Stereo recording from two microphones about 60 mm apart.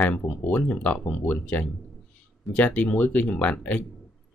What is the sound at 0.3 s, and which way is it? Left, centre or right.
Speech, left.